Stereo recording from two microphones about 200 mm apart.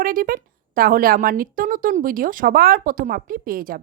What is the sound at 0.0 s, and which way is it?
A woman's voice, 45° right (ahead or behind).